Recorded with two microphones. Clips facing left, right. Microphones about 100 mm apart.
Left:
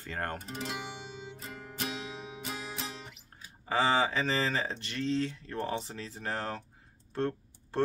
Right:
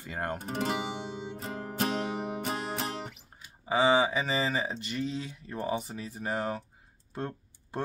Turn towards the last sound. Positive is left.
turn(degrees=-10)  # may be behind; listen again after turning